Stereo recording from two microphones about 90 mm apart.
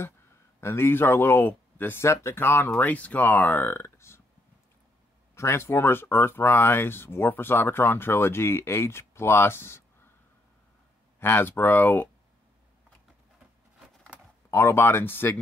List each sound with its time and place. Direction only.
0.6 s speech: 25° left (ahead or behind)
5.3 s speech: 30° left (ahead or behind)
11.1 s speech: 25° left (ahead or behind)
14.5 s speech: 30° left (ahead or behind)